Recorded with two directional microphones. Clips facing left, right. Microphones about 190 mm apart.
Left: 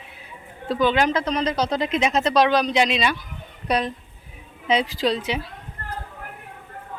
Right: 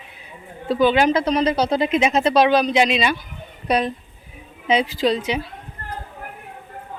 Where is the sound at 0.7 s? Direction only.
5° right (ahead or behind).